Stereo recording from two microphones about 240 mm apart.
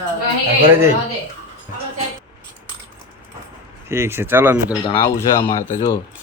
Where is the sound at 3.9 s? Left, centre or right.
Centre.